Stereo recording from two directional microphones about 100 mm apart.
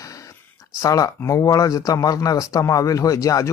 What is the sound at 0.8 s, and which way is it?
Speech, 35° left (ahead or behind).